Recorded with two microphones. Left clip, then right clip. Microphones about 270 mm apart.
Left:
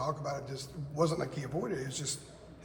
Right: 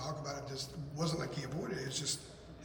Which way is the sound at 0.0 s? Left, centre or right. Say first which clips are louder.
Left 6 dB; left.